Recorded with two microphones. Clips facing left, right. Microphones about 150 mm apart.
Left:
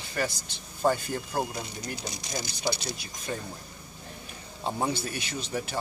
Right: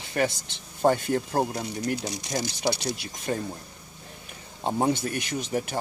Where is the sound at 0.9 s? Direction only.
60° right (ahead or behind).